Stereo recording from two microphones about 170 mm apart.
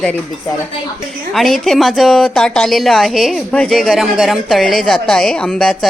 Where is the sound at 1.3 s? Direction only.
Centre (ahead or behind).